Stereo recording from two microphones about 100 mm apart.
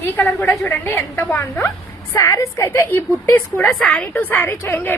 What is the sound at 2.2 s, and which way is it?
Speech, 30° left (ahead or behind).